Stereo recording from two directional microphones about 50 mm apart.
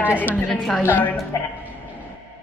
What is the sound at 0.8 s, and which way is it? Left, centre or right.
Speech, left.